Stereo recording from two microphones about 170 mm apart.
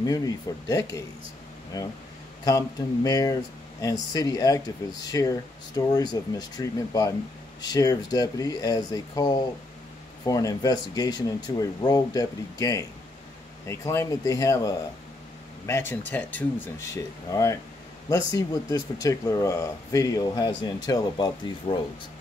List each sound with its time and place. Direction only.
0.0 s speech: 20° left (ahead or behind)